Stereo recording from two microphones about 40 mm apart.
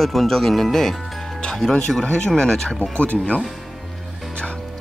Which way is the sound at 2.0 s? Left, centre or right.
Centre.